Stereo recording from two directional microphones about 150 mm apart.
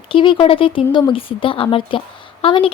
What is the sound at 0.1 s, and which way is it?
Speech, 35° left (ahead or behind).